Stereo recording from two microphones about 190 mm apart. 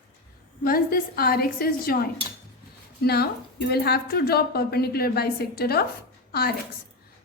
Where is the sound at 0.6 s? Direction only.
50° left (ahead or behind).